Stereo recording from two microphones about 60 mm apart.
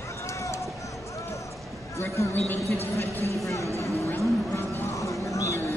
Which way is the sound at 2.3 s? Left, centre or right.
Left.